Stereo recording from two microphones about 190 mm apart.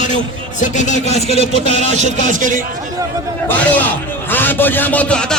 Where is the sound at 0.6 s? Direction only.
40° left (ahead or behind).